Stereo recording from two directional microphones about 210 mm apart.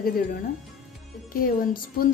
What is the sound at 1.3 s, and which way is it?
Speech, 40° left (ahead or behind).